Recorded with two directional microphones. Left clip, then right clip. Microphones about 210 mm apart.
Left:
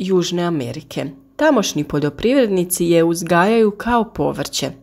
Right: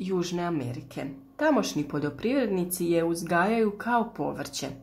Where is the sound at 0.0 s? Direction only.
35° left (ahead or behind).